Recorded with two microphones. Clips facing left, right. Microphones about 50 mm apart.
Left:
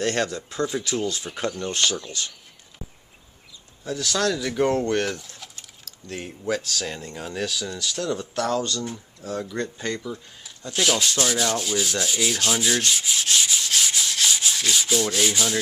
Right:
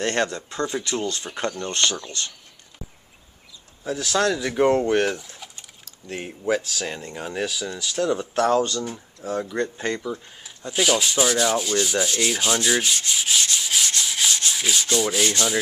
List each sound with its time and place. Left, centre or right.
0.0 s speech: centre
0.3 s rub: centre
2.0 s speech: centre
3.8 s speech: centre
8.8 s speech: centre
11.9 s rub: centre